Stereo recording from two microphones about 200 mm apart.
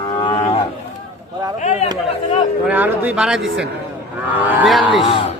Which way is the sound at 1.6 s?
35° left (ahead or behind).